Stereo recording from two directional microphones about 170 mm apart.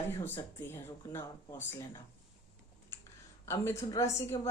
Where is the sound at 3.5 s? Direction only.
15° left (ahead or behind).